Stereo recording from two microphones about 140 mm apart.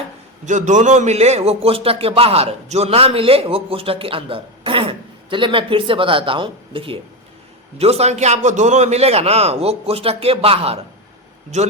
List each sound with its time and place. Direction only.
0.4 s a man's voice: 60° right (ahead or behind)